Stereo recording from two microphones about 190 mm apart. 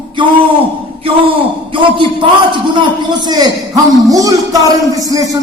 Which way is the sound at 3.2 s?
20° right (ahead or behind).